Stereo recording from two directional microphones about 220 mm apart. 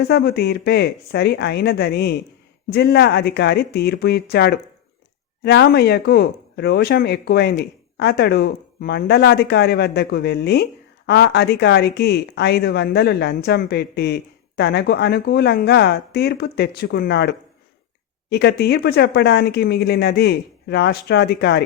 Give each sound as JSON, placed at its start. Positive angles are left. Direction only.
{"t": 0.0, "sound": "speech", "side_deg": 45}